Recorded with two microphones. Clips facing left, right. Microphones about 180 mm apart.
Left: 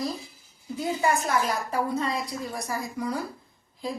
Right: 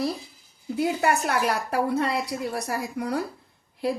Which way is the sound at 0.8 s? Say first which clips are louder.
Right 2 dB; 65° right (ahead or behind).